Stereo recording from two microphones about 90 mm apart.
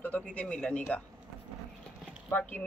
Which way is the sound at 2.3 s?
20° left (ahead or behind).